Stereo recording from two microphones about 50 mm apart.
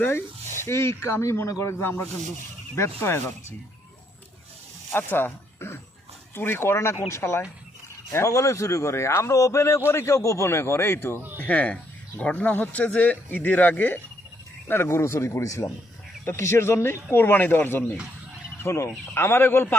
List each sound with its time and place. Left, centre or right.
0.6 s a man's voice: left
1.8 s a man's voice: left
4.9 s a man's voice: left
8.1 s a man's voice: left
9.9 s a man's voice: left
11.3 s speech: left
14.7 s speech: left
16.2 s speech: left
18.6 s speech: left
19.1 s speech: left